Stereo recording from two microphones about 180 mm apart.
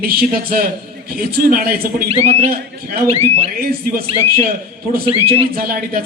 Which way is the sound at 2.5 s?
60° right (ahead or behind).